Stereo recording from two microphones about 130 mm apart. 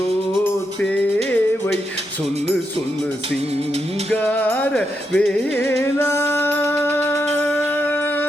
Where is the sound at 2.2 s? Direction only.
55° right (ahead or behind).